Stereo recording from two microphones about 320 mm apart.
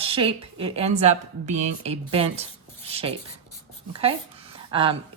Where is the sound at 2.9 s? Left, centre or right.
Centre.